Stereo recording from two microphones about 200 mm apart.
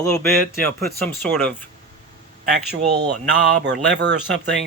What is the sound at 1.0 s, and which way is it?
Speech, 10° left (ahead or behind).